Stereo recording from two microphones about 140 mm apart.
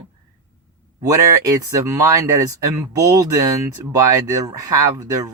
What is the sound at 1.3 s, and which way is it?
Speech, 25° right (ahead or behind).